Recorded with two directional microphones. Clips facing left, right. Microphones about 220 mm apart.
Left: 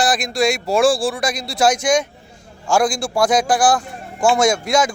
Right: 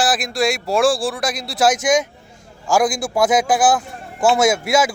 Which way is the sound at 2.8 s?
20° right (ahead or behind).